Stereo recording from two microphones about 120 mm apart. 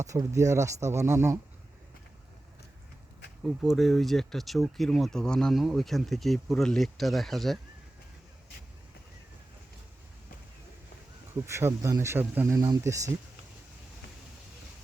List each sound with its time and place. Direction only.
0.0 s speech: 25° right (ahead or behind)
3.4 s speech: 5° right (ahead or behind)
11.4 s speech: 25° right (ahead or behind)
12.5 s speech: 30° right (ahead or behind)